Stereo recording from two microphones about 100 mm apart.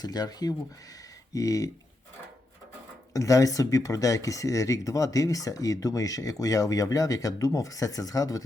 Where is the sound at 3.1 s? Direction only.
35° left (ahead or behind).